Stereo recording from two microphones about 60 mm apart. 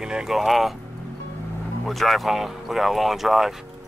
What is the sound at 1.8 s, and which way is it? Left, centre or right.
Speech, centre.